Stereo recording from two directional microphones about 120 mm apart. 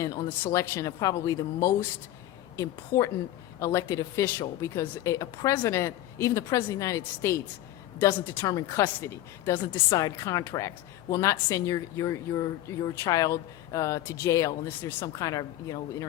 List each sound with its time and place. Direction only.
0.0 s speech: 25° left (ahead or behind)